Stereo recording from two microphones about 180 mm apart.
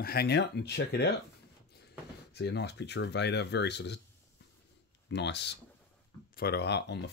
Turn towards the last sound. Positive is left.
turn(degrees=70)  # may be behind; listen again after turning